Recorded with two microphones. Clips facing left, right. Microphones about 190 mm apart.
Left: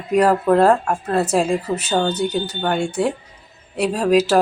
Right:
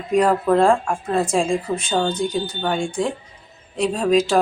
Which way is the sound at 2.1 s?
70° left (ahead or behind).